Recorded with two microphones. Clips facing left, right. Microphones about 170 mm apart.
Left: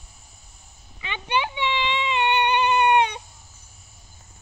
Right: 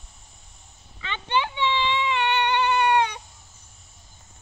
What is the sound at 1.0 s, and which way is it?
Baby cry, 15° left (ahead or behind).